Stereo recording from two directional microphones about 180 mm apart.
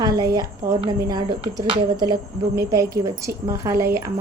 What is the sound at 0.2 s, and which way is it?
A woman's voice, 20° right (ahead or behind).